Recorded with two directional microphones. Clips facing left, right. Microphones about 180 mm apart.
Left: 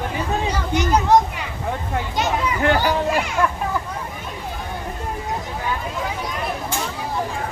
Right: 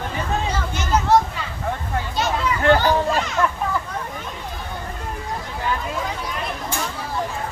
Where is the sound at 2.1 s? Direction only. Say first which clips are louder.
Even; 15° left (ahead or behind).